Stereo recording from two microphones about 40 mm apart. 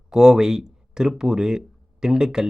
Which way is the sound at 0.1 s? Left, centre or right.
Centre.